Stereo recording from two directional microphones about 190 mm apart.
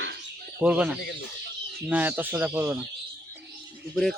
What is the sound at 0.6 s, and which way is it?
Speech, 5° right (ahead or behind).